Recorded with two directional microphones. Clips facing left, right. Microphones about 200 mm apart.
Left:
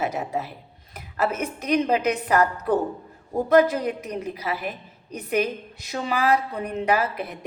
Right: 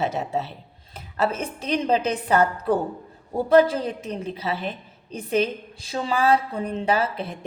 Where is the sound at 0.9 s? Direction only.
30° right (ahead or behind).